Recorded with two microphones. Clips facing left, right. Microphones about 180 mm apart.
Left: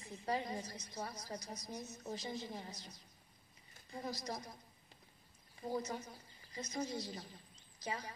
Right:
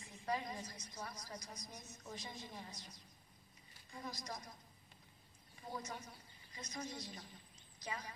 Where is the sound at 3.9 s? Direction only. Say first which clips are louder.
Left 5 dB; 35° left (ahead or behind).